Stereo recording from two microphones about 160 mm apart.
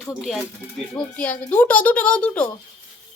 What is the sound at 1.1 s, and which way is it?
A child's voice, 10° left (ahead or behind).